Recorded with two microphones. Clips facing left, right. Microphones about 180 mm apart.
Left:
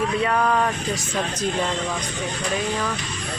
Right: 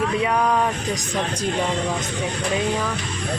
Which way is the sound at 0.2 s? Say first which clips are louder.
Even; 10° right (ahead or behind).